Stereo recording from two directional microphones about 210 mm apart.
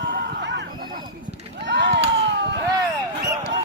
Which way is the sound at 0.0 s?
55° right (ahead or behind).